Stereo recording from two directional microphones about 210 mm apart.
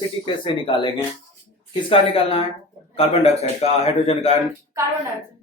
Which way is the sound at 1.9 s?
25° left (ahead or behind).